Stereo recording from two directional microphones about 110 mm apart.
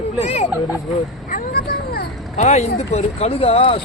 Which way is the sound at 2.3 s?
85° left.